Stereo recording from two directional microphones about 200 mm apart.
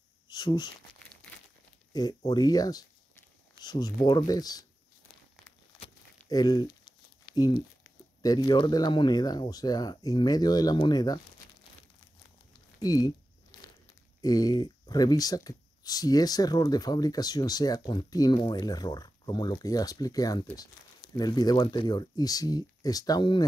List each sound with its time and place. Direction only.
0.3 s speech: 20° left (ahead or behind)
1.9 s speech: 20° left (ahead or behind)
5.8 s crumpling: 20° left (ahead or behind)
7.3 s speech: 20° left (ahead or behind)
12.8 s speech: 20° left (ahead or behind)
14.2 s speech: 20° left (ahead or behind)